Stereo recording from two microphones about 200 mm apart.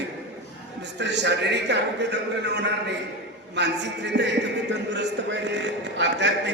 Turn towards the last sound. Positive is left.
turn(degrees=-60)  # may be behind; listen again after turning